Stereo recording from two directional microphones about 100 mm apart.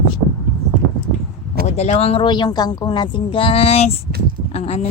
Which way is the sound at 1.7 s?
90° left.